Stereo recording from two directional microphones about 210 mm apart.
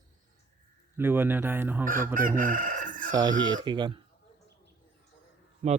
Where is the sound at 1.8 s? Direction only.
40° right (ahead or behind).